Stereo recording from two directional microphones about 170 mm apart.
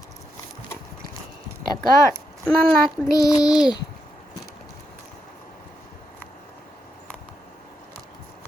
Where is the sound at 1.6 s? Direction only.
60° right (ahead or behind).